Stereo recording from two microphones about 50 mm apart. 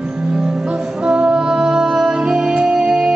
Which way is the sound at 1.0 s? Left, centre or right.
Centre.